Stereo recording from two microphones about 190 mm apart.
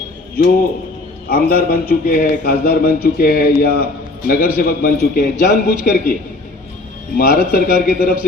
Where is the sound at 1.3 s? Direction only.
50° left (ahead or behind).